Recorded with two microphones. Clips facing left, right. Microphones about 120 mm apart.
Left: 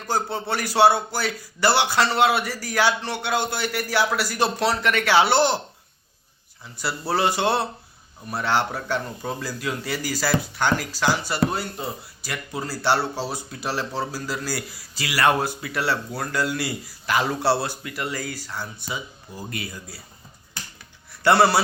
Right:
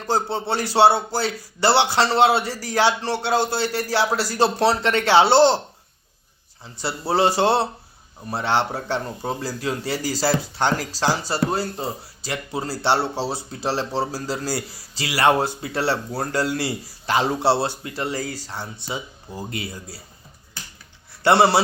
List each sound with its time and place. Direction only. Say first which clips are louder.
0.0 s speech: right 3 dB; 30° right (ahead or behind)
6.6 s speech: right 1 dB; 25° right (ahead or behind)
21.1 s speech: right 1 dB; 25° right (ahead or behind)